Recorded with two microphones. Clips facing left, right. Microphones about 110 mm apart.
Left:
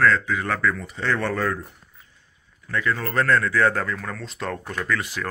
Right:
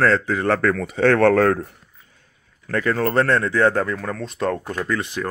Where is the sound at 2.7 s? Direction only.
45° right (ahead or behind).